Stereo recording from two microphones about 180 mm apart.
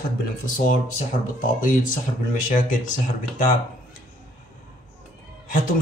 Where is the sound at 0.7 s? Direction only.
45° left (ahead or behind).